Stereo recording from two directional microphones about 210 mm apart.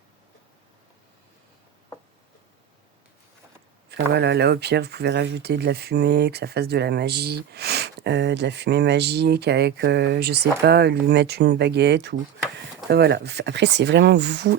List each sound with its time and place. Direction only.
3.8 s speech: 50° right (ahead or behind)